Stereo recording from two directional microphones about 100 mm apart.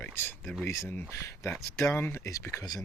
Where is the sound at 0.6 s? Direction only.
30° left (ahead or behind).